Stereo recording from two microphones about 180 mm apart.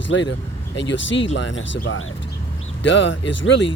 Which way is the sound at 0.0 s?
90° left.